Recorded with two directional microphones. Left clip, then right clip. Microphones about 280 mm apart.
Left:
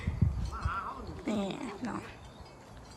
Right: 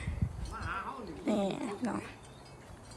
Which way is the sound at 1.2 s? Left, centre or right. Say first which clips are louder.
Right 3 dB; centre.